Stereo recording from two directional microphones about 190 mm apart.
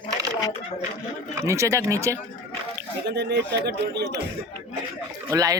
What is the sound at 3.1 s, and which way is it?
Speech, 65° right (ahead or behind).